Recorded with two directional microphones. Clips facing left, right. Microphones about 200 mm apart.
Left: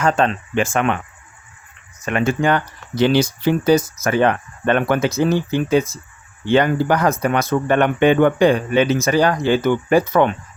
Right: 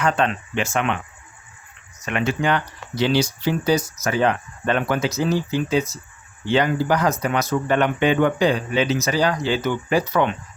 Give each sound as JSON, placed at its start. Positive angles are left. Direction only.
{"t": 0.0, "sound": "speech", "side_deg": 40}
{"t": 2.0, "sound": "speech", "side_deg": 45}